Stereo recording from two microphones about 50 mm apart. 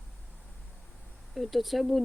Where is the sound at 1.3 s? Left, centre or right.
Centre.